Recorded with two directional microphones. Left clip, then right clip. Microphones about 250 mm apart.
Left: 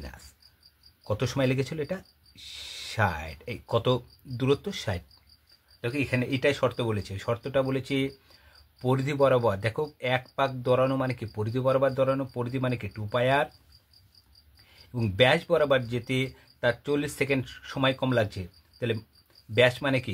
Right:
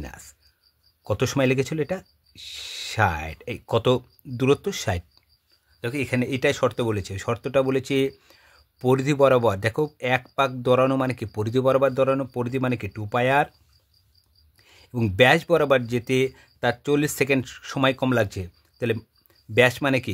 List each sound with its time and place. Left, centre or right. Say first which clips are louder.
1.0 s speech: right 5 dB; right
14.9 s speech: right 5 dB; right